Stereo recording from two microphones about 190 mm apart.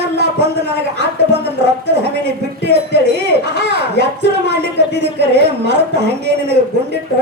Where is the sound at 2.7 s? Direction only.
60° right (ahead or behind).